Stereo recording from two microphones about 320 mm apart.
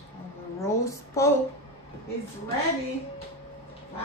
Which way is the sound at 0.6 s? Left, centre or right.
Centre.